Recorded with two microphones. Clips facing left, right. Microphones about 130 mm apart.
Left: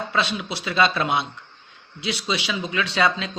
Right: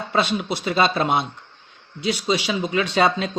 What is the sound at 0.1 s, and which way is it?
A man's voice, 45° right (ahead or behind).